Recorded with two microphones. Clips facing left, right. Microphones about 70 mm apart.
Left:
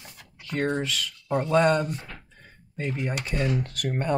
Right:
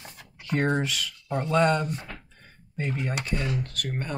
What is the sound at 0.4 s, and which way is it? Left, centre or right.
Speech, centre.